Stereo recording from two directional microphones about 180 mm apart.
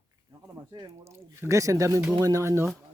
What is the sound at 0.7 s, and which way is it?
Speech, 20° right (ahead or behind).